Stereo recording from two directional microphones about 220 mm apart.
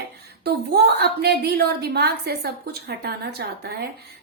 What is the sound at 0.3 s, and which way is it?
A woman's voice, 45° right (ahead or behind).